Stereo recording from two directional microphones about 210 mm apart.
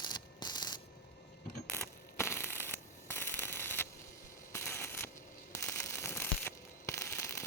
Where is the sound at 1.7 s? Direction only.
10° left (ahead or behind).